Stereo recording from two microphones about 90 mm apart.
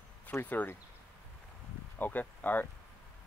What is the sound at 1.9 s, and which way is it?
Speech, 20° left (ahead or behind).